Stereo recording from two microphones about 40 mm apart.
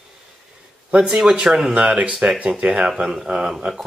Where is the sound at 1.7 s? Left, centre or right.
Right.